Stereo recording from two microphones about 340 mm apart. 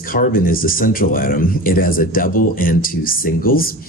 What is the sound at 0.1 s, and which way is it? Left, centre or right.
Speech, left.